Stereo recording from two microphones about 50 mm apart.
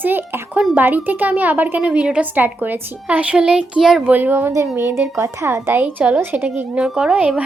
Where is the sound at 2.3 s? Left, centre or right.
Right.